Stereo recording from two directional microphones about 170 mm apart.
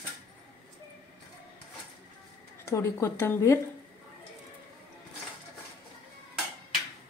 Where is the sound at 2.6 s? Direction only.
15° left (ahead or behind).